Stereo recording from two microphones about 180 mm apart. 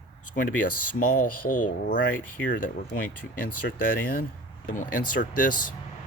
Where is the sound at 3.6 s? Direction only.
75° left (ahead or behind).